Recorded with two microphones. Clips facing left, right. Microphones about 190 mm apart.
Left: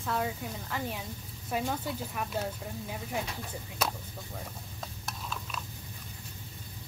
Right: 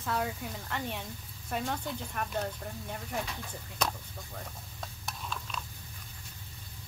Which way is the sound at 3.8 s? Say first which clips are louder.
Even; 5° left (ahead or behind).